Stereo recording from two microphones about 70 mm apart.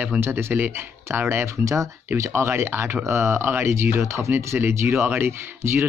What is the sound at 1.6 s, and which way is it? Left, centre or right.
Speech, right.